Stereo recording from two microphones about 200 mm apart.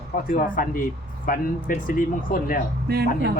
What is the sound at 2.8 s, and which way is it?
Speech, 50° right (ahead or behind).